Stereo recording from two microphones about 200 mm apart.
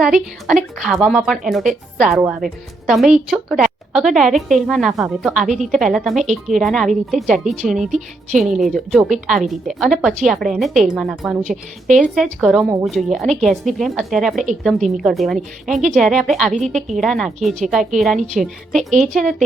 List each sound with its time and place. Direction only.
0.0 s a woman's voice: 5° right (ahead or behind)
11.4 s a woman's voice: 40° right (ahead or behind)
11.9 s a woman's voice: centre (ahead or behind)